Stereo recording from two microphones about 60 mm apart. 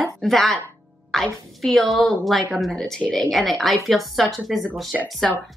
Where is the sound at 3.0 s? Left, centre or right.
Centre.